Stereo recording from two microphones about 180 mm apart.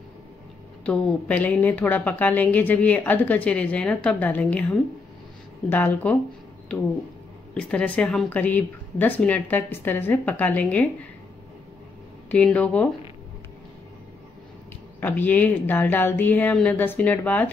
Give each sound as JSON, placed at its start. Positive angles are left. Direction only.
{"t": 0.8, "sound": "a woman's voice", "side_deg": 5}
{"t": 7.5, "sound": "a woman's voice", "side_deg": 5}
{"t": 12.3, "sound": "a woman's voice", "side_deg": 5}
{"t": 15.0, "sound": "a woman's voice", "side_deg": 10}